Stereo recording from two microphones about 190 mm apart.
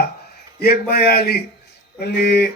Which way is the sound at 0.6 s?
55° left (ahead or behind).